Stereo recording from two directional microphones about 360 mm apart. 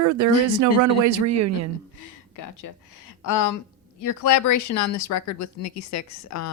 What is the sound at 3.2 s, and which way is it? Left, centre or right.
Speech, left.